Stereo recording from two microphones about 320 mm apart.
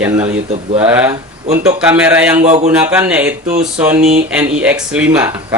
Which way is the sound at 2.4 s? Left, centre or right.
Right.